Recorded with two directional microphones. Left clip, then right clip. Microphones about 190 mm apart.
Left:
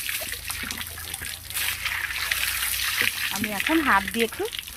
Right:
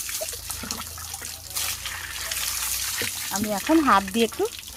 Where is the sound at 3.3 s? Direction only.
55° right (ahead or behind).